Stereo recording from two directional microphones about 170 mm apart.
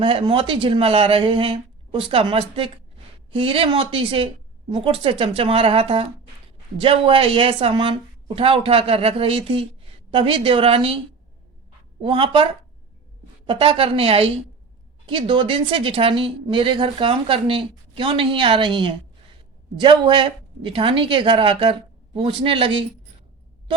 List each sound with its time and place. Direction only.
0.0 s speech: 30° right (ahead or behind)
12.0 s speech: 30° right (ahead or behind)
13.5 s a woman's voice: 30° right (ahead or behind)